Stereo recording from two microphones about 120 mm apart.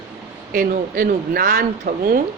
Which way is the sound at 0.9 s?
90° right.